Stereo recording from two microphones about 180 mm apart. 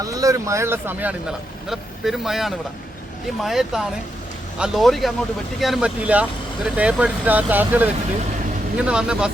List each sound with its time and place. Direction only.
0.0 s speech: 20° right (ahead or behind)
1.7 s speech: centre (ahead or behind)